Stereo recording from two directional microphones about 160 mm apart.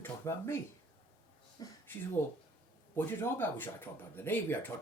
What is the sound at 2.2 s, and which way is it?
Speech, 10° left (ahead or behind).